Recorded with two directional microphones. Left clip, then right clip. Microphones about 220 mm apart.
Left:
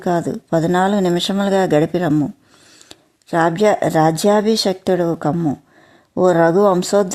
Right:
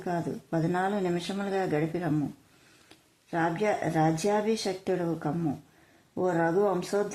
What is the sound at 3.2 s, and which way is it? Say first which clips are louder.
A woman's voice: left 13 dB; 45° left (ahead or behind).